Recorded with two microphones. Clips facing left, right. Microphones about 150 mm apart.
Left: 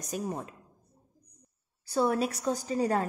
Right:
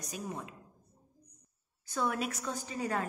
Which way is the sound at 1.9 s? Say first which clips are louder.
Left 7 dB; 35° left (ahead or behind).